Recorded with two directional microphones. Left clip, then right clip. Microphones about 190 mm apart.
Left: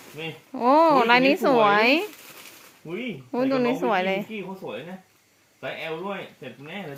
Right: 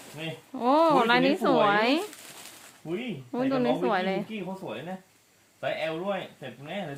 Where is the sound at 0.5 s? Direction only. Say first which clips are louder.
Left 4 dB; 10° left (ahead or behind).